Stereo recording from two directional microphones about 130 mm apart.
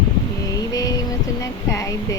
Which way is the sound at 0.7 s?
25° left (ahead or behind).